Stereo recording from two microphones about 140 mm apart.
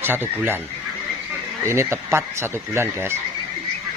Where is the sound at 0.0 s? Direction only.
15° right (ahead or behind).